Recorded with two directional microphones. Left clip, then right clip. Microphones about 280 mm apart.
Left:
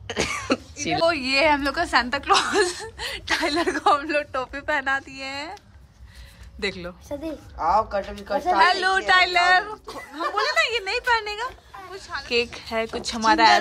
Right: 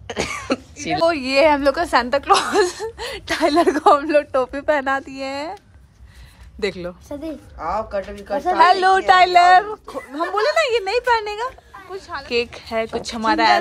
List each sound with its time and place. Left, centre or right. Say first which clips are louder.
0.0 s speech: right 1 dB; centre
6.6 s speech: right 4 dB; centre
7.5 s speech: left 3 dB; centre
8.5 s speech: right 6 dB; centre